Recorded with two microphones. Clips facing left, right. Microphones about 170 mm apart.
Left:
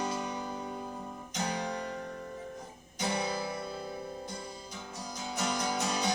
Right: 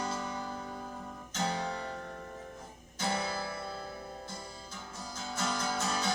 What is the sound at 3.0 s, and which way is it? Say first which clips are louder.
Guitar: left 2 dB; 15° left (ahead or behind).